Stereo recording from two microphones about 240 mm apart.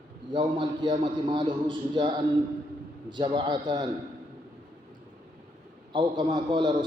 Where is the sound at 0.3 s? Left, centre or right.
Centre.